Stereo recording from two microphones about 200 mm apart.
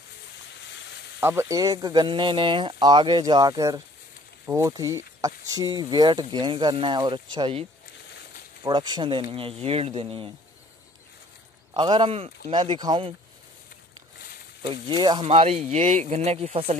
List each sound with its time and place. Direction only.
1.2 s speech: 15° right (ahead or behind)
8.6 s speech: 20° right (ahead or behind)
11.7 s speech: 25° right (ahead or behind)
14.6 s speech: 25° right (ahead or behind)